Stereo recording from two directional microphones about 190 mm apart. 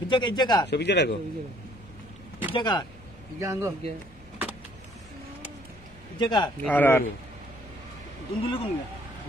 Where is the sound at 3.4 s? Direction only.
15° right (ahead or behind).